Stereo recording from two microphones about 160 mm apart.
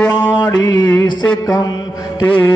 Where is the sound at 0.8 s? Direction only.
10° left (ahead or behind).